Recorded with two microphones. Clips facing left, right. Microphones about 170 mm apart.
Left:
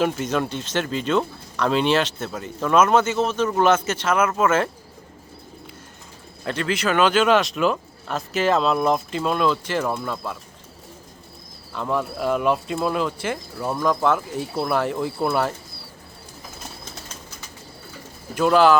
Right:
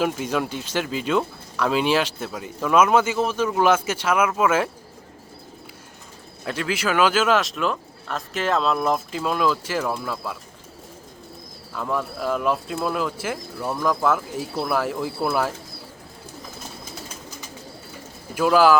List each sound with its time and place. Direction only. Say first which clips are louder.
0.0 s speech: left 1 dB; 5° right (ahead or behind)
6.4 s speech: left 2 dB; 5° right (ahead or behind)
11.7 s speech: left 2 dB; centre (ahead or behind)
18.3 s speech: left 1 dB; 5° right (ahead or behind)